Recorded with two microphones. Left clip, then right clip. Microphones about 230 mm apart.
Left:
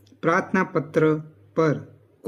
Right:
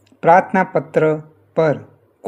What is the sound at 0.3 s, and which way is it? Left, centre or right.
Speech, centre.